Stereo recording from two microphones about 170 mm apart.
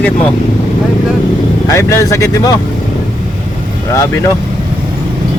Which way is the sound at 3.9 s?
15° left (ahead or behind).